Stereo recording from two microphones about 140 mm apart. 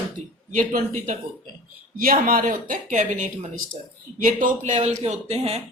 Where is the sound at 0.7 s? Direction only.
70° right (ahead or behind).